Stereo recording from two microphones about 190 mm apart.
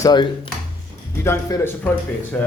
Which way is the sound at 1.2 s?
10° left (ahead or behind).